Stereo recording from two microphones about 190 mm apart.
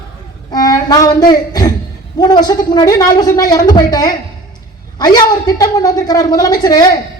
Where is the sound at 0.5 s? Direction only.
20° left (ahead or behind).